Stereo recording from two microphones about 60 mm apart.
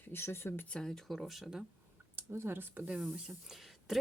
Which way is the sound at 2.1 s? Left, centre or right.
Right.